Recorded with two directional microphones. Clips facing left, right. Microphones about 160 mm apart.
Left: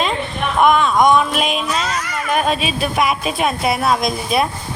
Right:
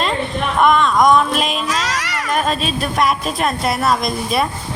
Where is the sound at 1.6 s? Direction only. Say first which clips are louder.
Even; 90° right.